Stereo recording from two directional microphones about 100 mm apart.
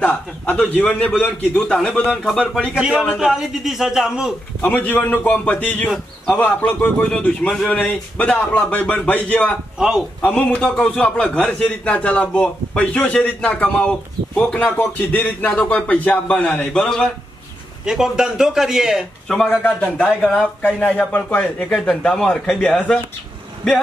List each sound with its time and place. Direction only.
0.0 s a man's voice: 15° left (ahead or behind)
3.2 s speech: 5° right (ahead or behind)
4.6 s a man's voice: 15° left (ahead or behind)
9.8 s speech: 5° right (ahead or behind)
10.2 s a man's voice: 10° left (ahead or behind)
17.8 s speech: 5° right (ahead or behind)
19.6 s a man's voice: 15° left (ahead or behind)
21.7 s speech: 5° left (ahead or behind)